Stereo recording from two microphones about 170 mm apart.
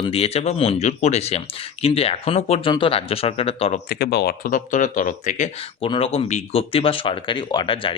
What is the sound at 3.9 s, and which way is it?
Speech, 70° left (ahead or behind).